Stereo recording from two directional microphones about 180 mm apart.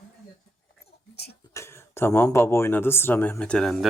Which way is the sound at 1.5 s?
15° left (ahead or behind).